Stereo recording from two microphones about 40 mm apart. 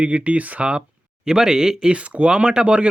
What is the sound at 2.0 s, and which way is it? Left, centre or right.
Speech, right.